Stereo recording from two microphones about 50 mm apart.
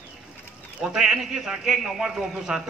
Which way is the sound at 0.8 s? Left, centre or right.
Centre.